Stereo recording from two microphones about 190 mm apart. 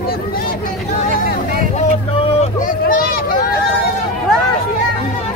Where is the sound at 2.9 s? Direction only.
50° left (ahead or behind).